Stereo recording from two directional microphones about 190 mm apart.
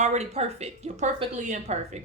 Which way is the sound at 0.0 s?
35° right (ahead or behind).